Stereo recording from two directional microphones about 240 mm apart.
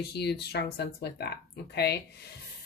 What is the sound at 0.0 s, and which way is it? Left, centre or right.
A woman's voice, left.